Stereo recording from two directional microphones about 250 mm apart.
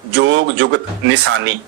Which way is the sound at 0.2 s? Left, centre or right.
Right.